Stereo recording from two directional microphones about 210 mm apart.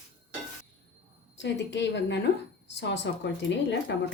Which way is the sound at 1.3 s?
55° left (ahead or behind).